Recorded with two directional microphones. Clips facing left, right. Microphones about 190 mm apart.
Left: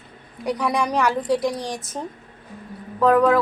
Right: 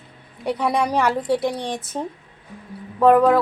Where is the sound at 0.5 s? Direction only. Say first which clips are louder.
Right 2 dB; 25° right (ahead or behind).